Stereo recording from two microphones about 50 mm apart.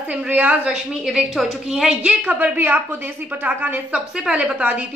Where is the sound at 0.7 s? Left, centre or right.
Centre.